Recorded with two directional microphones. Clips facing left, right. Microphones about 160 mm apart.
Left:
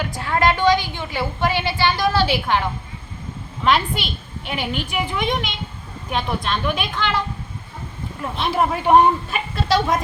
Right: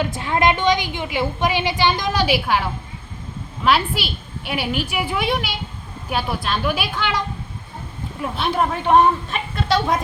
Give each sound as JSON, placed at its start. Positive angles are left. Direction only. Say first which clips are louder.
{"t": 0.0, "sound": "a woman's voice", "louder": "right 1 dB", "side_deg": -20}
{"t": 8.2, "sound": "a woman's voice", "louder": "even", "side_deg": 0}
{"t": 9.6, "sound": "a woman's voice", "louder": "even", "side_deg": 0}